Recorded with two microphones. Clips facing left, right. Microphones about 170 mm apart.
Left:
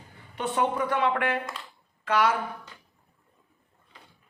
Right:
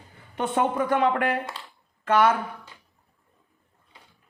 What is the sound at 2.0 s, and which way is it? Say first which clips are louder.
Speech: right 4 dB; 50° right (ahead or behind).